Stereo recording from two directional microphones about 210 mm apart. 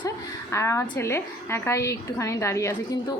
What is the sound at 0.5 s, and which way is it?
A woman's voice, 15° left (ahead or behind).